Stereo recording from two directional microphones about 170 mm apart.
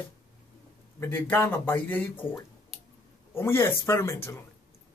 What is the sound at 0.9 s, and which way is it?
Speech, 15° left (ahead or behind).